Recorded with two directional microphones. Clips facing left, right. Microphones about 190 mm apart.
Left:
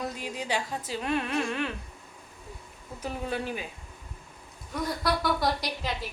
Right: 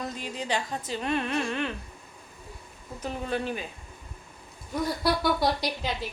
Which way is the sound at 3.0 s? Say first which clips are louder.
Right 2 dB; 10° left (ahead or behind).